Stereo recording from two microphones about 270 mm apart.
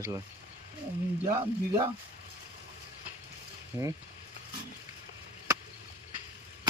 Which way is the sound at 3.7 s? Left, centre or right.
Centre.